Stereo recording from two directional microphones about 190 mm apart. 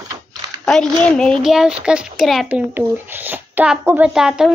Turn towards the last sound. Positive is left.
turn(degrees=-5)  # may be behind; listen again after turning